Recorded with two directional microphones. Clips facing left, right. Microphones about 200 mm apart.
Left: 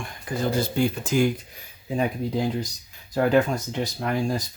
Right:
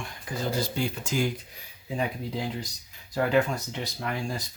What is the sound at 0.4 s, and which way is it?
Speech, 55° left (ahead or behind).